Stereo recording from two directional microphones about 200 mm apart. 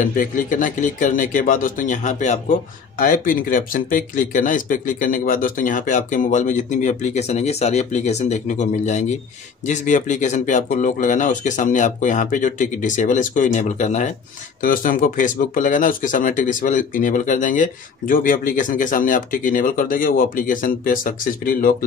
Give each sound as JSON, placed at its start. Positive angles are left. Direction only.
{"t": 0.0, "sound": "speech", "side_deg": 40}